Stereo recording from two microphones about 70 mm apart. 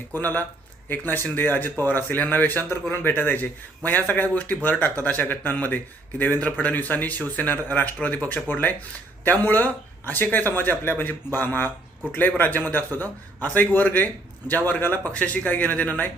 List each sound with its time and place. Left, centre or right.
0.1 s speech: left